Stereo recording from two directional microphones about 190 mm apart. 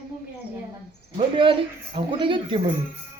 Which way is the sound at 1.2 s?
25° right (ahead or behind).